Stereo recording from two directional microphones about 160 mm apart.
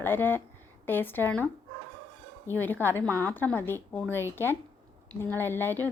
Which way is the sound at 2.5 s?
10° left (ahead or behind).